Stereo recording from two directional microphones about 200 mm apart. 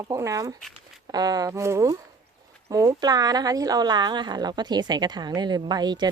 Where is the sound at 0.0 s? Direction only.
15° right (ahead or behind).